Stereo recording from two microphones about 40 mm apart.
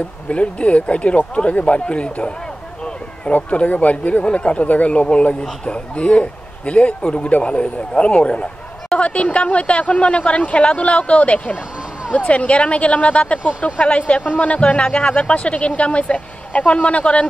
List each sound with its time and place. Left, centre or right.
0.3 s speech: left
3.3 s speech: left